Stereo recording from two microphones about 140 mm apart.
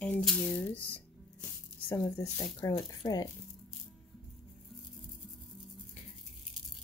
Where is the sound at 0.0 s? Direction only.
5° left (ahead or behind).